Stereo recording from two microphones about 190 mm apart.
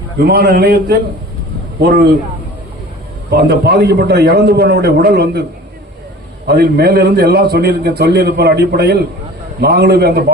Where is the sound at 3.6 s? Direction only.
55° right (ahead or behind).